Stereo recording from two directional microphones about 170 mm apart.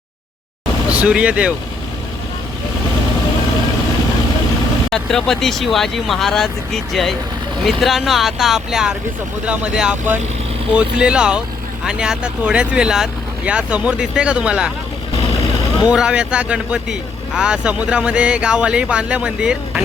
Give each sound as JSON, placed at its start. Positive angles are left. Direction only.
{"t": 0.9, "sound": "speech", "side_deg": -5}
{"t": 4.9, "sound": "speech", "side_deg": 5}
{"t": 7.6, "sound": "speech", "side_deg": 0}
{"t": 15.3, "sound": "vehicle", "side_deg": 35}
{"t": 15.9, "sound": "speech", "side_deg": -5}